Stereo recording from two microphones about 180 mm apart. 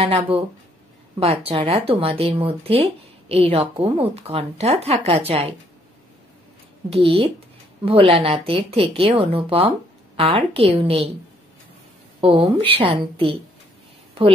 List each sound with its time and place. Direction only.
0.0 s speech: 30° right (ahead or behind)
7.2 s speech: 30° right (ahead or behind)
12.2 s speech: 30° right (ahead or behind)